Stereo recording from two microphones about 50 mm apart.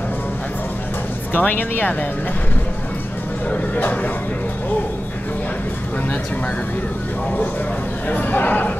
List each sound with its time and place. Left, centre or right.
1.3 s speech: left
3.4 s speech: left
8.1 s speech: left